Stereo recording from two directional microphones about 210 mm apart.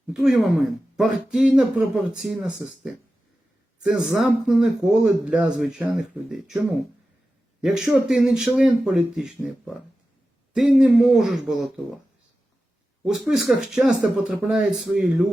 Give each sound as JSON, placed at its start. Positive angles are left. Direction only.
{"t": 0.1, "sound": "speech", "side_deg": 0}
{"t": 7.6, "sound": "speech", "side_deg": 0}
{"t": 13.1, "sound": "speech", "side_deg": -5}